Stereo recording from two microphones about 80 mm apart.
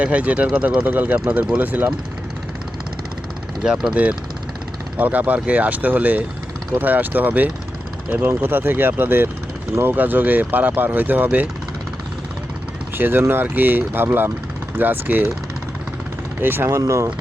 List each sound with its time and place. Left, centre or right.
0.0 s speech: centre
3.6 s speech: centre
13.0 s speech: right
16.4 s speech: right
16.6 s speech: right